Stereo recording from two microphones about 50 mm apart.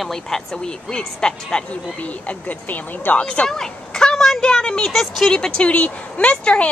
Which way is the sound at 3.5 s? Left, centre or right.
Centre.